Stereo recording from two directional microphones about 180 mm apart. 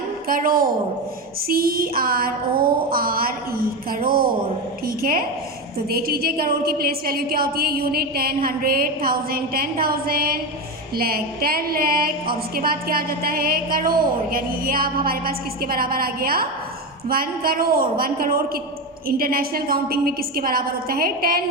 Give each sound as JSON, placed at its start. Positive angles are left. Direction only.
{"t": 0.3, "sound": "a woman's voice", "side_deg": -50}